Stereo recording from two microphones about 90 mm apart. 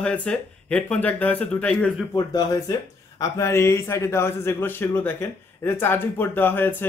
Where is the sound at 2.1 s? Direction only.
45° left (ahead or behind).